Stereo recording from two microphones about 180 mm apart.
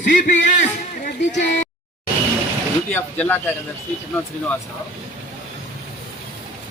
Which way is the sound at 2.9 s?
10° left (ahead or behind).